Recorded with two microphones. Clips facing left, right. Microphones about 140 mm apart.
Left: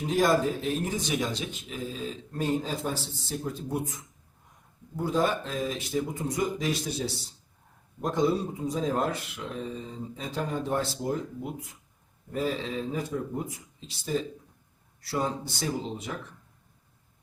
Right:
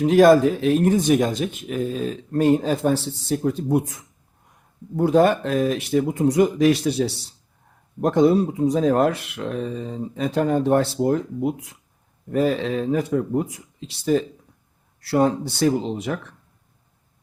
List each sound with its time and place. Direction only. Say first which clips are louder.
0.0 s speech: right 11 dB; 75° right (ahead or behind)
4.9 s speech: right 10 dB; 70° right (ahead or behind)